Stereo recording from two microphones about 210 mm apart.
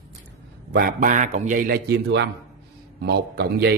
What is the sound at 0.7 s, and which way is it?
A man's voice, 40° right (ahead or behind).